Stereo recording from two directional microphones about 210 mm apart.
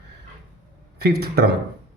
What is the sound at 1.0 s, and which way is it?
Speech, 50° right (ahead or behind).